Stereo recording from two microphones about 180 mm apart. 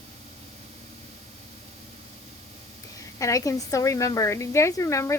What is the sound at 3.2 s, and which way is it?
A woman's voice, 20° left (ahead or behind).